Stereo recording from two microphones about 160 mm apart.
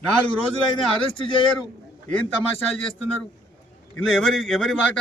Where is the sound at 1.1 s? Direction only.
35° left (ahead or behind).